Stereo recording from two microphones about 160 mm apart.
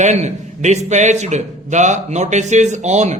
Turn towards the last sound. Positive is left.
turn(degrees=-45)  # may be behind; listen again after turning